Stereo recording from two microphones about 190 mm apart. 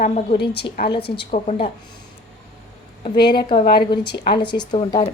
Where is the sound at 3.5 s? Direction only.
55° left (ahead or behind).